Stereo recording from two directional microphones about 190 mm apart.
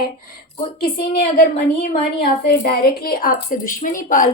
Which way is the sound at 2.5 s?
55° left (ahead or behind).